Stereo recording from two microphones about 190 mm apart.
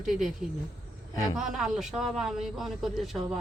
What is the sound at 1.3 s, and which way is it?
A man's voice, centre (ahead or behind).